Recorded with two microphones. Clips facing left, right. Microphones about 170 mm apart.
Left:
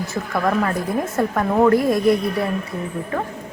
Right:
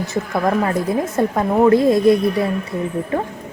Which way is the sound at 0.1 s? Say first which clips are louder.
Right 2 dB; 20° right (ahead or behind).